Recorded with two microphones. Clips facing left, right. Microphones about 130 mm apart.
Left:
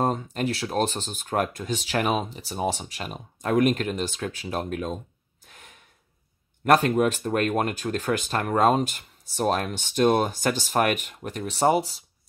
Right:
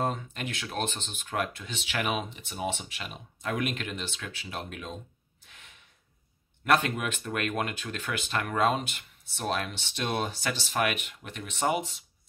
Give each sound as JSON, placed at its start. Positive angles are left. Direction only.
{"t": 0.0, "sound": "speech", "side_deg": 40}
{"t": 5.5, "sound": "gasp", "side_deg": 40}
{"t": 6.6, "sound": "speech", "side_deg": 40}